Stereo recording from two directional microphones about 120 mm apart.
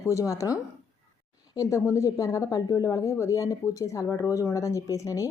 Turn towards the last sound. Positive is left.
turn(degrees=25)  # may be behind; listen again after turning